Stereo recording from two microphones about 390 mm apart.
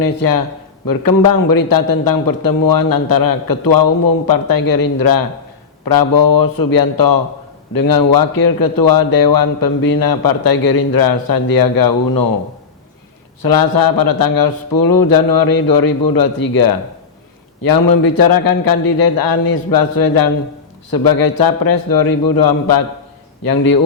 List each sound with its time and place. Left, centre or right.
0.0 s a man's voice: left
13.4 s a man's voice: left